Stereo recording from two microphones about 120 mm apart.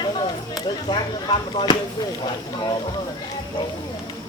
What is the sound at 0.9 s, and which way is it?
Speech, 40° left (ahead or behind).